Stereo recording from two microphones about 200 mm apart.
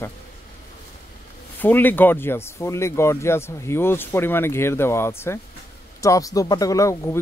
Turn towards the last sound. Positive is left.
turn(degrees=15)  # may be behind; listen again after turning